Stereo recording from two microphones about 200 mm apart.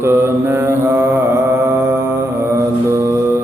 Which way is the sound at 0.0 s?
10° right (ahead or behind).